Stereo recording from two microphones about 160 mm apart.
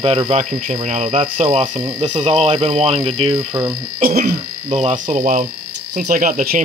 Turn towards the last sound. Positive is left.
turn(degrees=-65)  # may be behind; listen again after turning